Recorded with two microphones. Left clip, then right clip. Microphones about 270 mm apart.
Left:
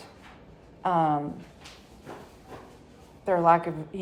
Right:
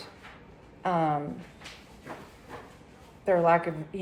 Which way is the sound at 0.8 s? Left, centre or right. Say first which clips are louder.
Left 3 dB; left.